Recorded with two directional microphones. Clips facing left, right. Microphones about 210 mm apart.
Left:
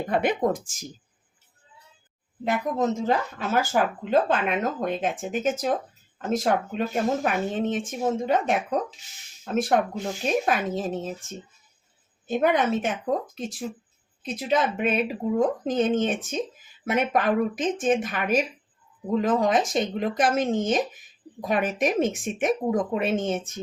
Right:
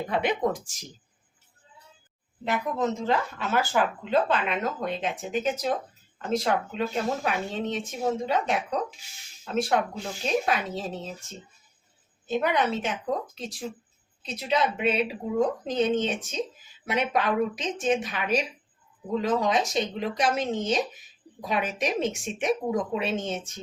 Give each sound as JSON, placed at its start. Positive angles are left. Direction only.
{"t": 0.1, "sound": "speech", "side_deg": 50}
{"t": 2.4, "sound": "speech", "side_deg": 45}
{"t": 12.3, "sound": "speech", "side_deg": 50}
{"t": 14.2, "sound": "speech", "side_deg": 50}